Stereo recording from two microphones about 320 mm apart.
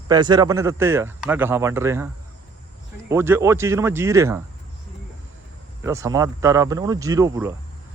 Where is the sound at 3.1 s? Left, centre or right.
Centre.